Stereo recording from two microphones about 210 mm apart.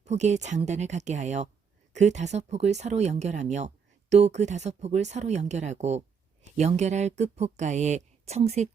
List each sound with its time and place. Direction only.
0.0 s speech: 35° right (ahead or behind)